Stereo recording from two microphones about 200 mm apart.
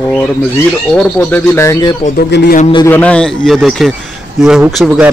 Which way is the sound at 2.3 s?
55° left (ahead or behind).